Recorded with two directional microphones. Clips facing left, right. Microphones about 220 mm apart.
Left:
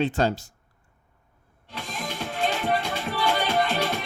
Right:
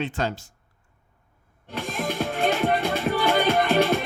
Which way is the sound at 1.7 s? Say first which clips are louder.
Right 6 dB; 50° right (ahead or behind).